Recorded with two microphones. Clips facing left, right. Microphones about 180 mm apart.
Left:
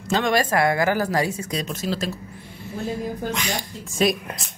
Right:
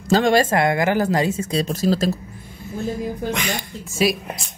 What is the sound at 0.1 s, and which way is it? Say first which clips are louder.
Speech: right 4 dB; 30° right (ahead or behind).